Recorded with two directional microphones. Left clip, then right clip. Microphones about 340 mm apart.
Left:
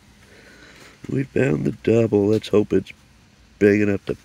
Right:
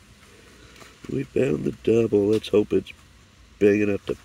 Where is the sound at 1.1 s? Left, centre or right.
Left.